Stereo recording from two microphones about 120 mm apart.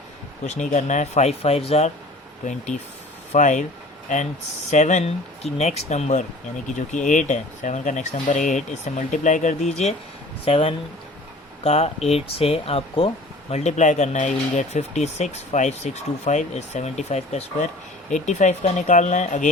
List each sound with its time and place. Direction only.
0.4 s speech: 90° left; by 1.9 s 60° left (ahead or behind)
2.4 s speech: 90° left
4.7 s speech: 80° left
6.7 s speech: 90° left; by 9.9 s 65° left (ahead or behind)
10.4 s speech: 50° left (ahead or behind)
13.5 s speech: 70° left (ahead or behind)
18.1 s speech: 85° left